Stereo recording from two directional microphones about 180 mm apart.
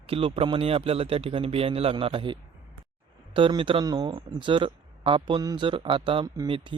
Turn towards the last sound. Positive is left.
turn(degrees=-25)  # may be behind; listen again after turning